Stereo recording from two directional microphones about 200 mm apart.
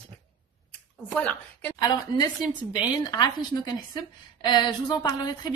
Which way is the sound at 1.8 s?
20° left (ahead or behind).